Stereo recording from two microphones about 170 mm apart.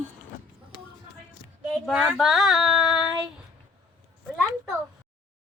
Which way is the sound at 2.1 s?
Centre (ahead or behind).